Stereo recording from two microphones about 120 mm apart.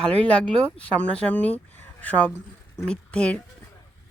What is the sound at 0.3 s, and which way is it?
Speech, 10° left (ahead or behind).